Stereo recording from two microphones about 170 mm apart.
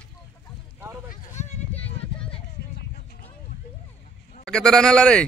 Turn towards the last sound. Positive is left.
turn(degrees=5)  # may be behind; listen again after turning